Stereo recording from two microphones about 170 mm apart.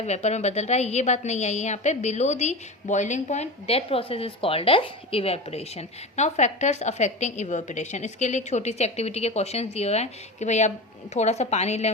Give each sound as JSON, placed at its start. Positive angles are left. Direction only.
{"t": 0.0, "sound": "a woman's voice", "side_deg": 40}